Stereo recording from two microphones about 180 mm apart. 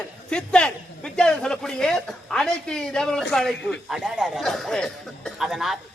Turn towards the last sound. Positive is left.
turn(degrees=0)  # may be behind; listen again after turning